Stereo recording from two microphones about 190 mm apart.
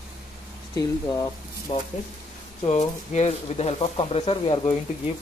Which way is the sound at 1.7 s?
25° left (ahead or behind).